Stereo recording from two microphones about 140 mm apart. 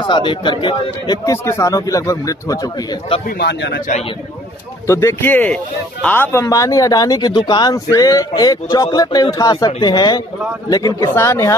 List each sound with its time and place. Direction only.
0.0 s speech: 35° left (ahead or behind)
3.3 s speech: 90° left
4.8 s speech: 20° left (ahead or behind)